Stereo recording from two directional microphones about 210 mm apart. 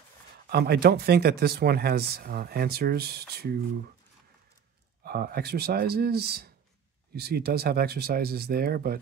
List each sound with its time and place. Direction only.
0.5 s speech: 50° right (ahead or behind)
5.0 s speech: 45° right (ahead or behind)